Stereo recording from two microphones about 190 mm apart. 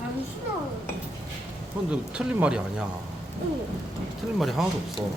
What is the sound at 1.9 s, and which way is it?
Speech, 5° right (ahead or behind).